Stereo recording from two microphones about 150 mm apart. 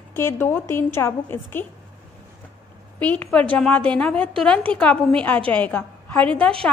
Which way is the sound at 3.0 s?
10° left (ahead or behind).